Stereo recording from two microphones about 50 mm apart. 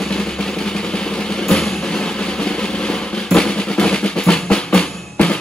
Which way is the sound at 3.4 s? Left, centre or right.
Centre.